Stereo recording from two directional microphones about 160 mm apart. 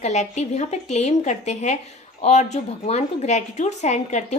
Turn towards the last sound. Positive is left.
turn(degrees=45)  # may be behind; listen again after turning